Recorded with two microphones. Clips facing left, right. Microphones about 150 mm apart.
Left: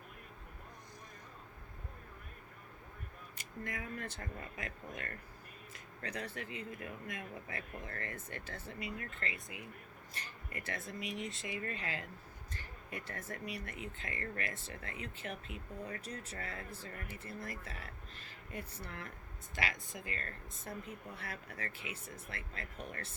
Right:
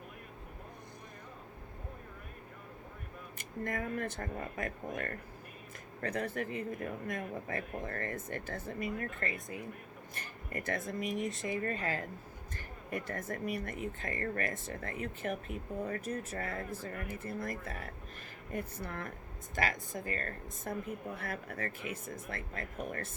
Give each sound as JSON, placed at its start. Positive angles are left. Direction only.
{"t": 3.3, "sound": "a man's voice", "side_deg": -50}